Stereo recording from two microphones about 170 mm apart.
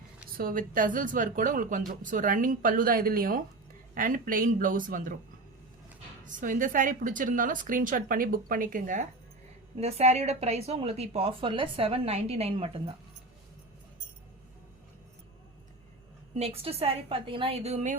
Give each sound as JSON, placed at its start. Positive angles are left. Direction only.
{"t": 0.3, "sound": "a woman's voice", "side_deg": -55}
{"t": 6.2, "sound": "a woman's voice", "side_deg": -50}
{"t": 9.7, "sound": "speech", "side_deg": -40}
{"t": 16.3, "sound": "speech", "side_deg": -35}